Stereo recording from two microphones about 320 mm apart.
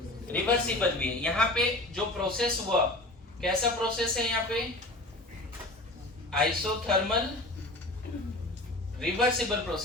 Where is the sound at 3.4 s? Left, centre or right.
Centre.